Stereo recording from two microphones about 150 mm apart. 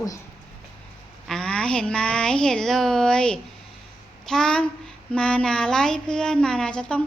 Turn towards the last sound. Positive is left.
turn(degrees=5)  # may be behind; listen again after turning